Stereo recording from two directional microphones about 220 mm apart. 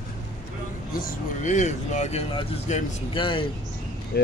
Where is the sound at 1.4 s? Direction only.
35° left (ahead or behind).